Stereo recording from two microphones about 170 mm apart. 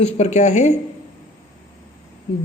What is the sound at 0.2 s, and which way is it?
Speech, 45° left (ahead or behind).